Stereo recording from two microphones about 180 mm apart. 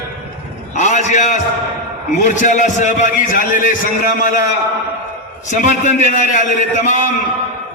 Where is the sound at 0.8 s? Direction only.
40° left (ahead or behind).